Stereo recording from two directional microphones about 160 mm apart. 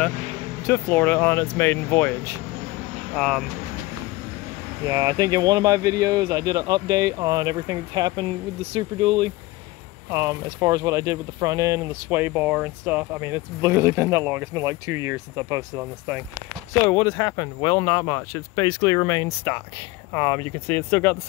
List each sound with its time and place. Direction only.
0.7 s speech: 10° left (ahead or behind)
4.8 s speech: 25° right (ahead or behind)
16.8 s speech: 20° left (ahead or behind)